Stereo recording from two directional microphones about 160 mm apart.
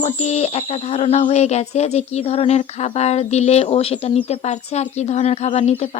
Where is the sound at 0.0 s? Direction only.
45° left (ahead or behind).